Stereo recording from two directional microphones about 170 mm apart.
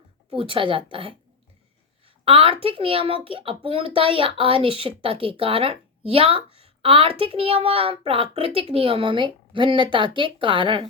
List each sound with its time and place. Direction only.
0.3 s a woman's voice: 30° right (ahead or behind)
2.2 s a woman's voice: 35° right (ahead or behind)